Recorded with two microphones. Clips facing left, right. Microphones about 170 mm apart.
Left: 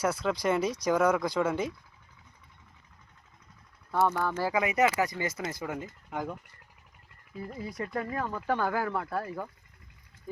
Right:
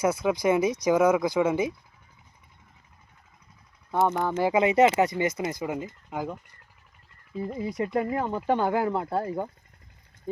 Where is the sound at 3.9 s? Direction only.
20° right (ahead or behind).